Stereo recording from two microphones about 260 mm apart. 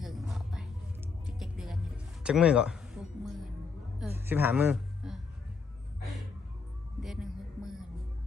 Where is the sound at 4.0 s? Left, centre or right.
Centre.